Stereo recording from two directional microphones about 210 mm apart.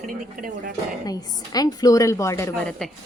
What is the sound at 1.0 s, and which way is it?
A woman's voice, 20° left (ahead or behind).